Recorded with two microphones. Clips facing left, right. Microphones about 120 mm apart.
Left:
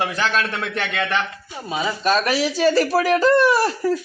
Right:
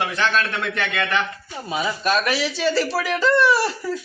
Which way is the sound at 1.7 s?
20° left (ahead or behind).